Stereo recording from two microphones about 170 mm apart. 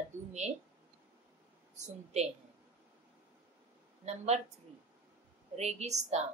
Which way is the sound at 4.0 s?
40° right (ahead or behind).